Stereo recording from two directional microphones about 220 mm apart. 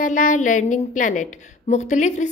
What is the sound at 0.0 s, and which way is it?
A woman's voice, 35° left (ahead or behind).